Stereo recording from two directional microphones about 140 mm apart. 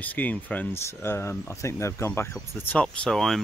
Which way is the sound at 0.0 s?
10° left (ahead or behind).